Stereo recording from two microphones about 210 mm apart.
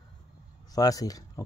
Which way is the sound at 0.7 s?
15° left (ahead or behind).